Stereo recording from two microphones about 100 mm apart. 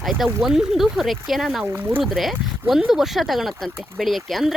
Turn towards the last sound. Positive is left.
turn(degrees=0)  # may be behind; listen again after turning